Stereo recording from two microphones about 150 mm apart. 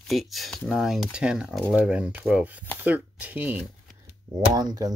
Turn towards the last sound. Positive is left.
turn(degrees=-25)  # may be behind; listen again after turning